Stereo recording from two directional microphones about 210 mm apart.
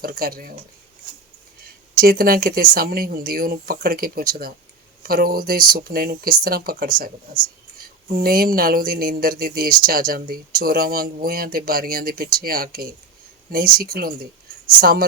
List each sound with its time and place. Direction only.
0.0 s speech: 45° right (ahead or behind)
2.0 s speech: 45° right (ahead or behind)